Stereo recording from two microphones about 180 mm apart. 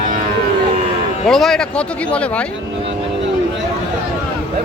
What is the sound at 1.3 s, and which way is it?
Speech, centre (ahead or behind).